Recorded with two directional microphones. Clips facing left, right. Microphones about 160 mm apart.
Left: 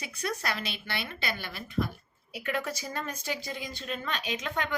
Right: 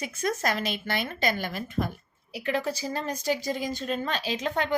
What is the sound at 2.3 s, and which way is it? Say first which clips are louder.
Speech: right 4 dB; 30° right (ahead or behind).